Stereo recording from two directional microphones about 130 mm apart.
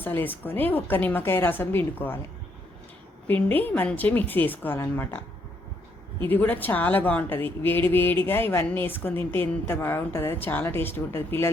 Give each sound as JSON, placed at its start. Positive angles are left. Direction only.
{"t": 0.0, "sound": "a woman's voice", "side_deg": 15}
{"t": 3.2, "sound": "a woman's voice", "side_deg": 15}
{"t": 6.2, "sound": "a woman's voice", "side_deg": 15}